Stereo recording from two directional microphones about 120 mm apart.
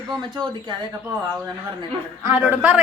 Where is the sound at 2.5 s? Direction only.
10° right (ahead or behind).